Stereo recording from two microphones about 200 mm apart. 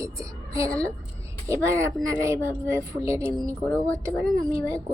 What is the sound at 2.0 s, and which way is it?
Speech, 15° right (ahead or behind).